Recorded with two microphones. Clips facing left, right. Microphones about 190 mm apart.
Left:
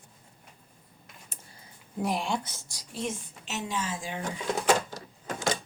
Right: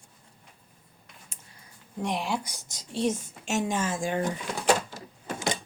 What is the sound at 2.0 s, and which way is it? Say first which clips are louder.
Speech: even; centre (ahead or behind).